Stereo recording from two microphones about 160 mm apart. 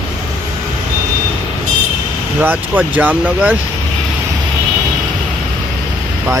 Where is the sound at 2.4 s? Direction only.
10° right (ahead or behind).